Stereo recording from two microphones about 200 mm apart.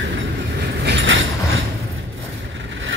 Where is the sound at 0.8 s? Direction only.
70° right (ahead or behind).